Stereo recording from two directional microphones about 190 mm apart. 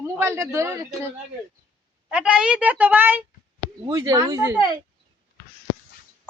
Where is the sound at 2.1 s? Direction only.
5° right (ahead or behind).